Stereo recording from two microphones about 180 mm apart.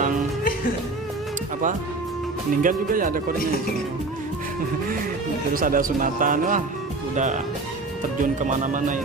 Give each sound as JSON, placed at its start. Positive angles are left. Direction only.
{"t": 2.6, "sound": "speech", "side_deg": -50}
{"t": 5.5, "sound": "speech", "side_deg": -50}
{"t": 8.2, "sound": "speech", "side_deg": -45}